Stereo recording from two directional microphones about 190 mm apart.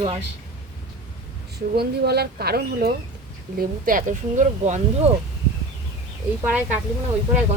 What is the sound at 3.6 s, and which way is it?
Speech, 45° right (ahead or behind).